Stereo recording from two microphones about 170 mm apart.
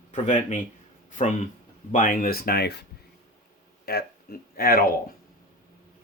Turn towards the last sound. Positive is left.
turn(degrees=60)  # may be behind; listen again after turning